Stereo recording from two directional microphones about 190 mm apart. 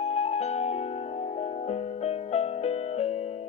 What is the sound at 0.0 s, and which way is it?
Music, 35° left (ahead or behind).